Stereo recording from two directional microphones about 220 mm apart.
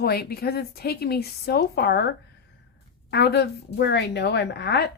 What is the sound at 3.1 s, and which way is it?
A woman's voice, 50° left (ahead or behind).